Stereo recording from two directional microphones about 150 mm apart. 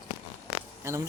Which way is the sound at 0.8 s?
20° right (ahead or behind).